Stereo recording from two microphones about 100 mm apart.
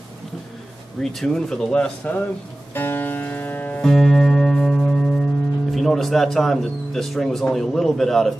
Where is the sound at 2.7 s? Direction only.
20° left (ahead or behind).